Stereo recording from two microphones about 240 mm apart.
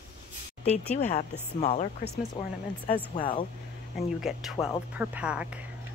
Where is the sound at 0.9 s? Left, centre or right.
Left.